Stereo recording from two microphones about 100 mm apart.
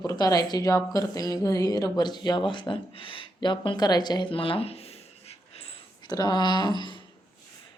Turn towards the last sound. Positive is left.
turn(degrees=50)  # may be behind; listen again after turning